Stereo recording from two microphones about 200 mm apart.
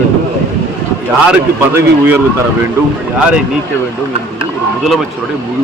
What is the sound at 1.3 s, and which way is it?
Speech, 10° right (ahead or behind).